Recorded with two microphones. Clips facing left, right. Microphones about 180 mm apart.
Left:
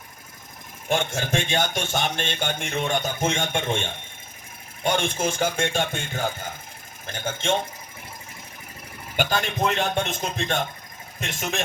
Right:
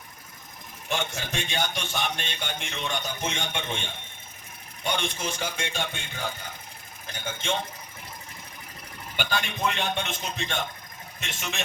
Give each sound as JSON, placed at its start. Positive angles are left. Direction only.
{"t": 0.9, "sound": "speech", "side_deg": 45}
{"t": 9.1, "sound": "speech", "side_deg": 45}